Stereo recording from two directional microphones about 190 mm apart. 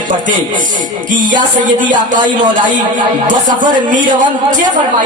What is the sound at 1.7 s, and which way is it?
Speech, 45° right (ahead or behind).